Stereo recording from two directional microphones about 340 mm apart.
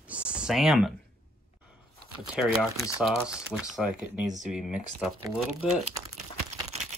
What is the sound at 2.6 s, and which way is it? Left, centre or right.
Speech, centre.